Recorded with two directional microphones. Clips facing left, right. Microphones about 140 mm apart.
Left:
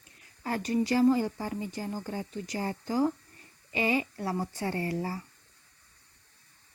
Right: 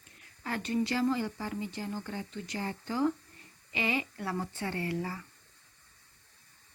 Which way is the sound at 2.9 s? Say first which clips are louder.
Left 2 dB; 35° left (ahead or behind).